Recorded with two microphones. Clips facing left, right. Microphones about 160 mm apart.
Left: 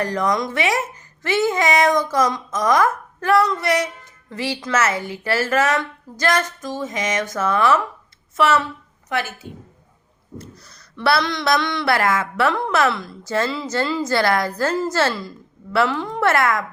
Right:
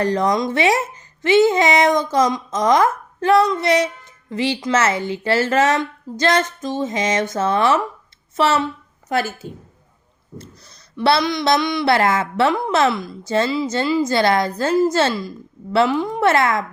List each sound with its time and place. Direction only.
0.0 s a woman's voice: 25° right (ahead or behind)
11.2 s a sound: 15° right (ahead or behind)
11.9 s a woman's voice: 25° right (ahead or behind)